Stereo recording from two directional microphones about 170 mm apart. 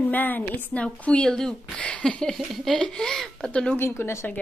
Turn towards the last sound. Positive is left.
turn(degrees=10)  # may be behind; listen again after turning